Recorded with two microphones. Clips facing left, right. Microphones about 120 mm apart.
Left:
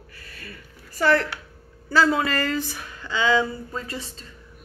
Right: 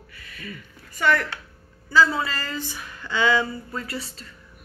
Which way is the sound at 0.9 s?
35° left (ahead or behind).